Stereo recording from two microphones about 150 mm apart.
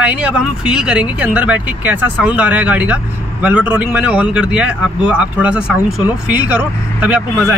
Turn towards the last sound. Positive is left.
turn(degrees=-10)  # may be behind; listen again after turning